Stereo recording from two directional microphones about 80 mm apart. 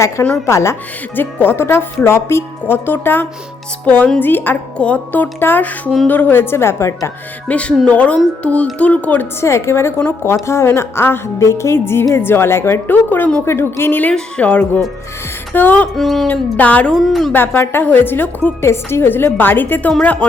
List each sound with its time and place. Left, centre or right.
0.4 s a woman's voice: left
1.1 s a woman's voice: left
7.4 s speech: centre
9.4 s a woman's voice: left
14.1 s a woman's voice: centre
16.0 s a woman's voice: centre
16.2 s a woman's voice: left
16.9 s a woman's voice: centre
17.3 s a woman's voice: left